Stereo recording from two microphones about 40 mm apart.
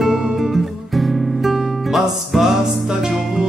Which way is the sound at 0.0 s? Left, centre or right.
Centre.